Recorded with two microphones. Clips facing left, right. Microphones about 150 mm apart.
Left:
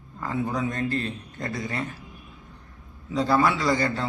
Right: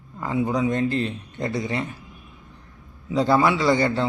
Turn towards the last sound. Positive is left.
turn(degrees=-25)  # may be behind; listen again after turning